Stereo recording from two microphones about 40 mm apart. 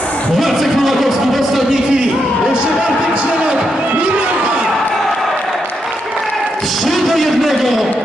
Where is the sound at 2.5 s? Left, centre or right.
Right.